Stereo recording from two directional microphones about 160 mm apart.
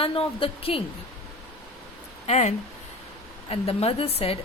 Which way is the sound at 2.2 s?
45° left (ahead or behind).